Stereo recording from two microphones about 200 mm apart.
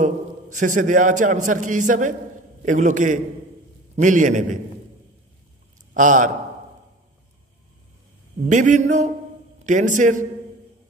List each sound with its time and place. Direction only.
0.0 s a man's voice: 40° right (ahead or behind)
5.9 s a man's voice: 40° right (ahead or behind)
8.4 s a man's voice: 40° right (ahead or behind)